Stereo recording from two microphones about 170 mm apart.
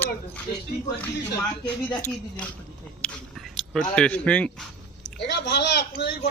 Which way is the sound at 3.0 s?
5° left (ahead or behind).